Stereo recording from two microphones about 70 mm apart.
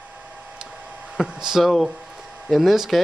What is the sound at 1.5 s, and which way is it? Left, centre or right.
Speech, centre.